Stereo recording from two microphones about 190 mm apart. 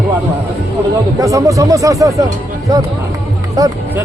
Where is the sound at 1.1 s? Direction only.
15° right (ahead or behind).